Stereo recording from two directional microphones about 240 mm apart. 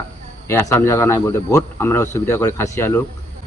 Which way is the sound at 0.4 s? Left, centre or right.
Centre.